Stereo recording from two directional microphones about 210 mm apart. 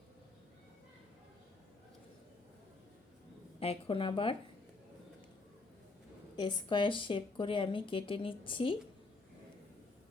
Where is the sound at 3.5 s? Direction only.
25° left (ahead or behind).